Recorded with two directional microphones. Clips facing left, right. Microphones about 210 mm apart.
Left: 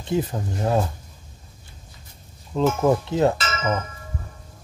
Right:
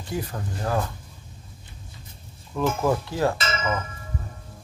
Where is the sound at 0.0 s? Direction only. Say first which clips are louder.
Left 6 dB; 20° left (ahead or behind).